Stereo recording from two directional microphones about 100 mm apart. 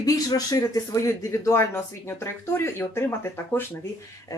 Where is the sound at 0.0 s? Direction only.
40° left (ahead or behind).